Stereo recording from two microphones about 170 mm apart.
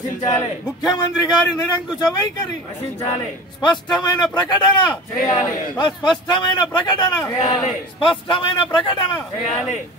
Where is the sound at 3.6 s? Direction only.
25° left (ahead or behind).